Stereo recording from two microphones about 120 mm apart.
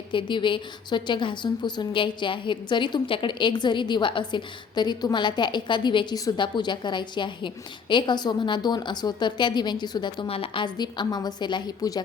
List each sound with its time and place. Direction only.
0.1 s a woman's voice: 40° left (ahead or behind)
6.1 s a woman's voice: 30° left (ahead or behind)